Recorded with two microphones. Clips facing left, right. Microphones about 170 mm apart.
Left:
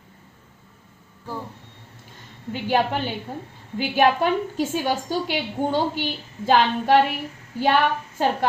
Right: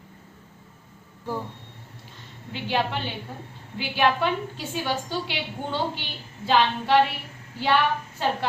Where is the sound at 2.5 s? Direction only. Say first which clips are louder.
Left 4 dB; 45° left (ahead or behind).